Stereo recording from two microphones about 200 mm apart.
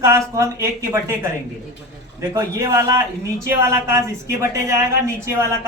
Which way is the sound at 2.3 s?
15° right (ahead or behind).